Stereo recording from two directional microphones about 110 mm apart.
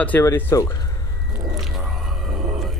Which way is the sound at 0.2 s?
20° left (ahead or behind).